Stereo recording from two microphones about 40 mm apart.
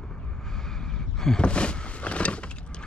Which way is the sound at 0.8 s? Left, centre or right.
Centre.